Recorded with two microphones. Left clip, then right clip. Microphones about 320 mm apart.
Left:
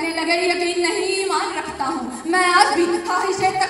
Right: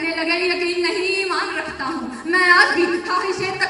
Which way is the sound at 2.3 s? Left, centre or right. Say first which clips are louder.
Right 1 dB; centre.